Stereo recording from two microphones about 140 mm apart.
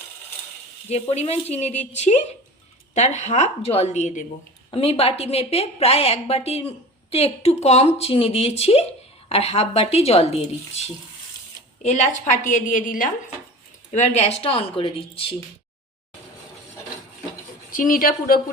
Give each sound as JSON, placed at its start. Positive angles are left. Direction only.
{"t": 0.9, "sound": "a woman's voice", "side_deg": 50}
{"t": 4.7, "sound": "a woman's voice", "side_deg": 45}
{"t": 12.5, "sound": "a woman's voice", "side_deg": 70}
{"t": 13.9, "sound": "a woman's voice", "side_deg": 55}
{"t": 17.7, "sound": "a woman's voice", "side_deg": 75}